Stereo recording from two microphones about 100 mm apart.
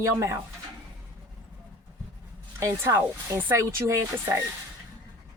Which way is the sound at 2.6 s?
30° right (ahead or behind).